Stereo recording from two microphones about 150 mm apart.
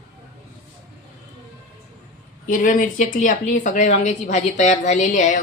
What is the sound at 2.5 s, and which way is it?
Speech, 60° left (ahead or behind).